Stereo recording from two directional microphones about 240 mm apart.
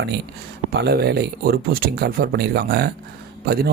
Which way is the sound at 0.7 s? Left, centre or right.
Right.